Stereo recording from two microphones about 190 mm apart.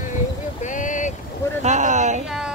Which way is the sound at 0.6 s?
40° left (ahead or behind).